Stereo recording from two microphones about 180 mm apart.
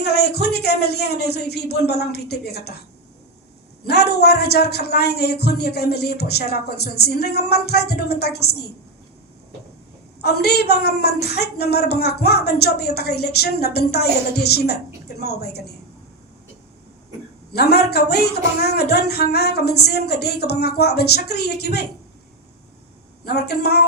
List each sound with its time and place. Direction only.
0.0 s speech: 65° left (ahead or behind)
3.8 s speech: 65° left (ahead or behind)
10.2 s speech: 65° left (ahead or behind)
17.5 s speech: 65° left (ahead or behind)
23.2 s speech: 65° left (ahead or behind)